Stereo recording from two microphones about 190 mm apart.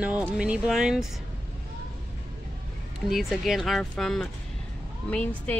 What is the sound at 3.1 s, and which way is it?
Speech, centre (ahead or behind).